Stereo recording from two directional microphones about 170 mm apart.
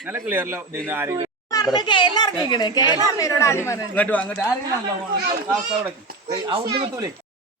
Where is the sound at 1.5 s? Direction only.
20° left (ahead or behind).